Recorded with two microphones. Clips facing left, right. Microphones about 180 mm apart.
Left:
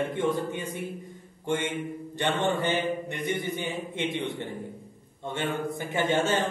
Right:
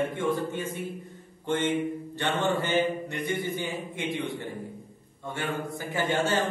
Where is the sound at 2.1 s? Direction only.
20° left (ahead or behind).